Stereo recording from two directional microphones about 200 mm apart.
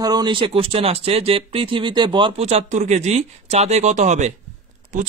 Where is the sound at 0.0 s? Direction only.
20° right (ahead or behind).